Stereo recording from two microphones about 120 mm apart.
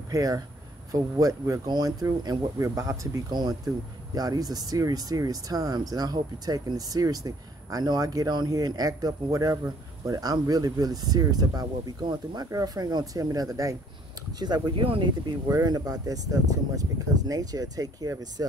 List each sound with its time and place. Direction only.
0.1 s speech: 30° right (ahead or behind)